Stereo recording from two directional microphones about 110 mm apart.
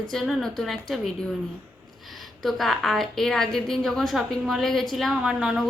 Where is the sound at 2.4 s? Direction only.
Centre (ahead or behind).